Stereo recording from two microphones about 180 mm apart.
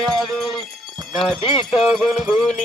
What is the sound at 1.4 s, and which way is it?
Speech, 30° left (ahead or behind).